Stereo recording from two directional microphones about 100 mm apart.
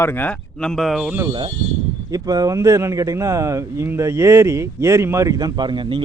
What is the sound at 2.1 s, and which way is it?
Speech, 35° right (ahead or behind).